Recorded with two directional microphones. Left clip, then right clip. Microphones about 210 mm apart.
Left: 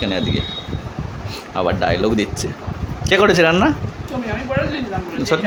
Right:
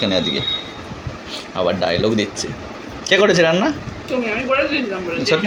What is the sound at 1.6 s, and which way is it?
Speech, 20° left (ahead or behind).